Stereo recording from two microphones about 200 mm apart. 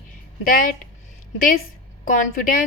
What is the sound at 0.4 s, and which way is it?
Speech, 45° left (ahead or behind).